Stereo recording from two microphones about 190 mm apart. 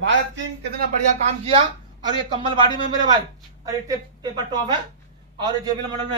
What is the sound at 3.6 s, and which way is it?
A man's voice, 20° right (ahead or behind).